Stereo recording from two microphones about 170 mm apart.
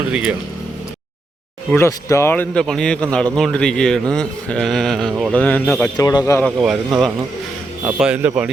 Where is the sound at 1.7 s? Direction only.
15° left (ahead or behind).